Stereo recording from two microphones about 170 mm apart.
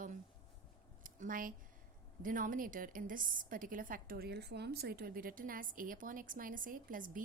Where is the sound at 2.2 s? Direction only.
55° right (ahead or behind).